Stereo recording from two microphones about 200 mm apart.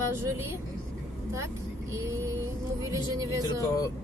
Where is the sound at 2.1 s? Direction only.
15° right (ahead or behind).